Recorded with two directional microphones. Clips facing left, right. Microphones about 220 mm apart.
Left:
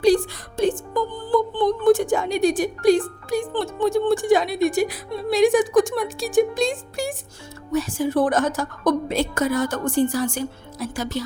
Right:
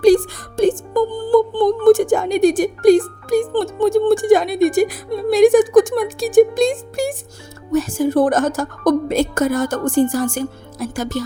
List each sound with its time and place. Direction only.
0.0 s a woman's voice: 45° right (ahead or behind)